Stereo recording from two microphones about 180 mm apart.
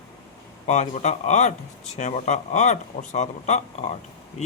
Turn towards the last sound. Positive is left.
turn(degrees=40)  # may be behind; listen again after turning